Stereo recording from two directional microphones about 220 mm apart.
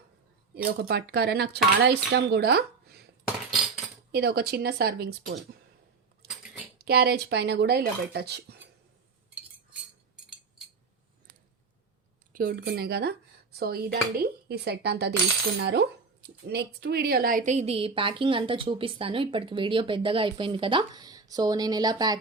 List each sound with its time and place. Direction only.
0.5 s speech: 45° right (ahead or behind)
4.1 s speech: 45° right (ahead or behind)
6.8 s speech: 45° right (ahead or behind)
12.3 s speech: 40° right (ahead or behind); by 22.2 s 20° right (ahead or behind)